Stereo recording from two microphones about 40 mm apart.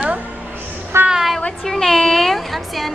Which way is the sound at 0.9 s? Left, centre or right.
Right.